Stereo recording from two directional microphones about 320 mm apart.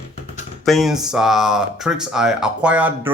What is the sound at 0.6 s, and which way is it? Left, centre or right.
Speech, centre.